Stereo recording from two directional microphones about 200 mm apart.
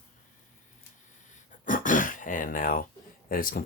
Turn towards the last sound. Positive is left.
turn(degrees=45)  # may be behind; listen again after turning